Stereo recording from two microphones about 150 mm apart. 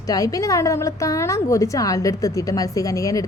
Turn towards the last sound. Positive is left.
turn(degrees=20)  # may be behind; listen again after turning